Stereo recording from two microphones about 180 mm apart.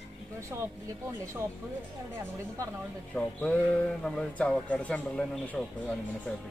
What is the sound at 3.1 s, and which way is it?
Speech, 5° left (ahead or behind).